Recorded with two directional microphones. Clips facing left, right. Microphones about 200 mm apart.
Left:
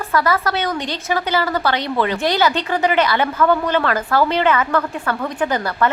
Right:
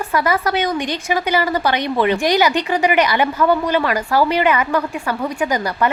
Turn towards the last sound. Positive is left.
turn(degrees=-15)  # may be behind; listen again after turning